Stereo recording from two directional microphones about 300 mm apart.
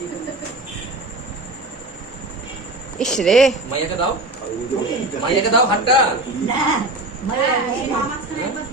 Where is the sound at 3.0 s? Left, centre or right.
Centre.